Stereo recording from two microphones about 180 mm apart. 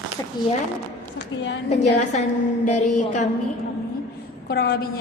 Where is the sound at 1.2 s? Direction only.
80° left.